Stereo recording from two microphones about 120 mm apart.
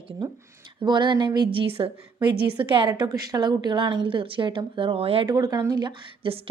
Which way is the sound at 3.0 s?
35° right (ahead or behind).